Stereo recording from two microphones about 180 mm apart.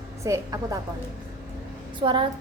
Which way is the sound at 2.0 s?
25° right (ahead or behind).